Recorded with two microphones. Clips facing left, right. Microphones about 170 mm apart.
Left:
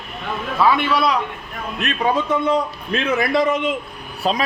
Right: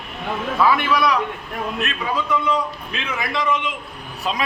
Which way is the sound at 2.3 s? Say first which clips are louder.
Left 3 dB; 45° left (ahead or behind).